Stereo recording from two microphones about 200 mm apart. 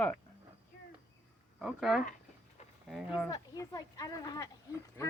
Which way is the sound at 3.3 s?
15° left (ahead or behind).